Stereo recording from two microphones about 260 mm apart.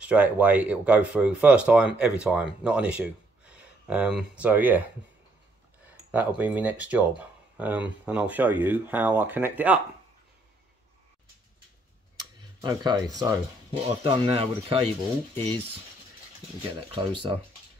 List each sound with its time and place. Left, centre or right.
0.0 s speech: centre
5.9 s speech: centre
12.2 s tick-tock: centre
13.1 s speech: centre
16.9 s speech: centre